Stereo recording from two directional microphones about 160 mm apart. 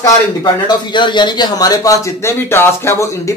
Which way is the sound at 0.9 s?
30° left (ahead or behind).